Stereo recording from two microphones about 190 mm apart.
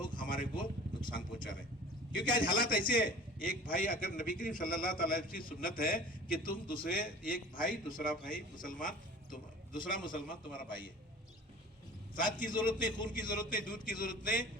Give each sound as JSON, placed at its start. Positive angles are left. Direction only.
{"t": 0.2, "sound": "a sound", "side_deg": 45}
{"t": 1.1, "sound": "a man's voice", "side_deg": 45}
{"t": 12.1, "sound": "a man's voice", "side_deg": 45}